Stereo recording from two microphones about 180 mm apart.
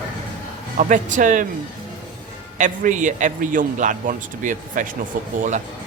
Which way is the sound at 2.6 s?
45° right (ahead or behind).